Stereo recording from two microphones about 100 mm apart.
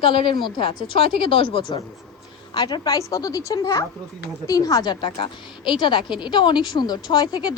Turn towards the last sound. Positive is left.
turn(degrees=45)  # may be behind; listen again after turning